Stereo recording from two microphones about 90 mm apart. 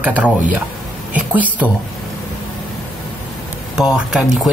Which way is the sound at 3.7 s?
5° right (ahead or behind).